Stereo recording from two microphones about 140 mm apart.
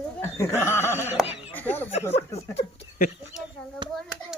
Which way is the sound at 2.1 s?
45° left (ahead or behind).